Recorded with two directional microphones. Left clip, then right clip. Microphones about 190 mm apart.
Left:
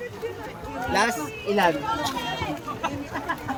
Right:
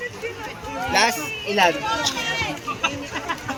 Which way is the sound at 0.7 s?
65° left (ahead or behind).